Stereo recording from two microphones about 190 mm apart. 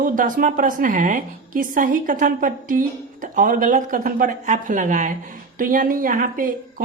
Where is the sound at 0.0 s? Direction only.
45° right (ahead or behind).